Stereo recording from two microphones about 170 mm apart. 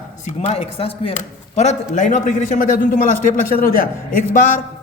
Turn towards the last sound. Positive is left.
turn(degrees=55)  # may be behind; listen again after turning